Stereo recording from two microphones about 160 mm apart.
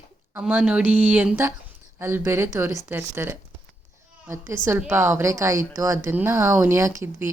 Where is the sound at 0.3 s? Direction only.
5° right (ahead or behind).